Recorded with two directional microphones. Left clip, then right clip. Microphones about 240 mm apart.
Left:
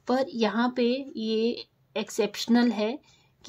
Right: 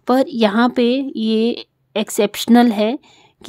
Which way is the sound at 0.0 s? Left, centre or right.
Right.